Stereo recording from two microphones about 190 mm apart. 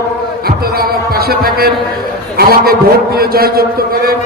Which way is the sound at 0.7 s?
55° right (ahead or behind).